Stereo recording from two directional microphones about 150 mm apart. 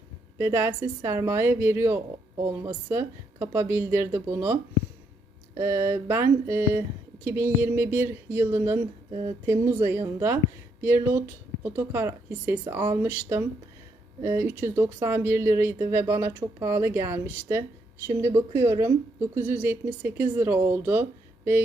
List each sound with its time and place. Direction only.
0.3 s speech: 15° right (ahead or behind)
5.5 s speech: 15° right (ahead or behind)